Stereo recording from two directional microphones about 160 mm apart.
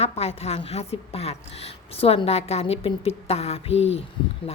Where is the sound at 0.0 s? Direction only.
40° left (ahead or behind).